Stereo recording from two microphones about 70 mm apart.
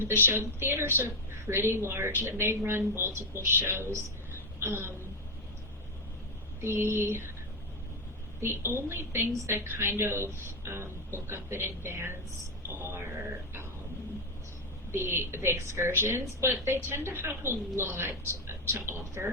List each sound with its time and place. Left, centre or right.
0.0 s a woman's voice: right
6.6 s a woman's voice: right
8.4 s a woman's voice: right
14.9 s a woman's voice: right